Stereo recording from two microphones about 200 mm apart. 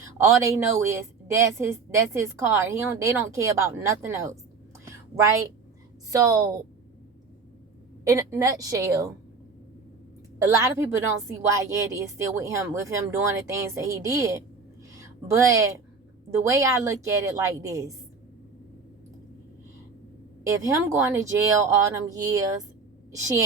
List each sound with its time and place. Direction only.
0.2 s a woman's voice: 15° right (ahead or behind)
4.9 s a sound: 15° right (ahead or behind)
6.1 s a woman's voice: 15° right (ahead or behind)
8.0 s a woman's voice: 15° right (ahead or behind)
10.3 s a woman's voice: 15° right (ahead or behind)
14.9 s a sound: 15° right (ahead or behind)
16.4 s a woman's voice: 15° right (ahead or behind)
20.4 s a woman's voice: 15° right (ahead or behind)